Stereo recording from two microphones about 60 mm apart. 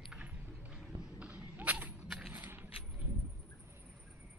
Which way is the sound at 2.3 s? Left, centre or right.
Right.